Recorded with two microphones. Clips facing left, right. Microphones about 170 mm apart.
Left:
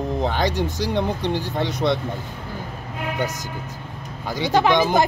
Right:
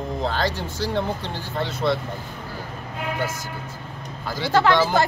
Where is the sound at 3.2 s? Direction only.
20° left (ahead or behind).